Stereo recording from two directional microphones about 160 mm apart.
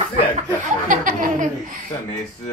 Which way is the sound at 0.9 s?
55° right (ahead or behind).